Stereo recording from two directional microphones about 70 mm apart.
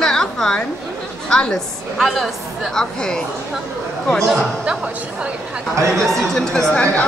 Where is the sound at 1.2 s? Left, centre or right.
Centre.